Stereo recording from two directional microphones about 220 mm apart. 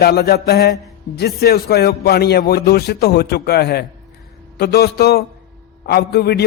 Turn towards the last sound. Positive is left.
turn(degrees=50)  # may be behind; listen again after turning